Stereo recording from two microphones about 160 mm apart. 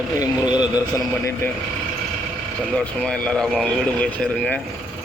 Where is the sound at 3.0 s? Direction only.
5° left (ahead or behind).